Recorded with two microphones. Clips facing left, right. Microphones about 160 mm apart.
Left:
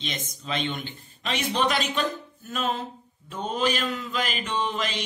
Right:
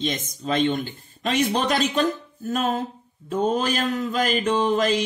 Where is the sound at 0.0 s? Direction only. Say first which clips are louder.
Right 8 dB; 45° right (ahead or behind).